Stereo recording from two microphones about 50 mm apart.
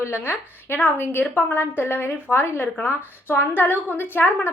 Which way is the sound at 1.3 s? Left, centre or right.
Left.